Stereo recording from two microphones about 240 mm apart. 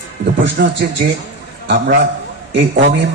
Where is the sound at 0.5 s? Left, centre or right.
Right.